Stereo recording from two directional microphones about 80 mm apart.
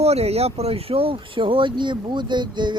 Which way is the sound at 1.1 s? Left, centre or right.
Right.